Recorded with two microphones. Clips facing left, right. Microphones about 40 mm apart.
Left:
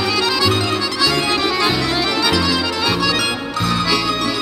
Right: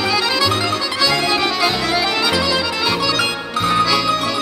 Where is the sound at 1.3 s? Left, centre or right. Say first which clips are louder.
Even; centre.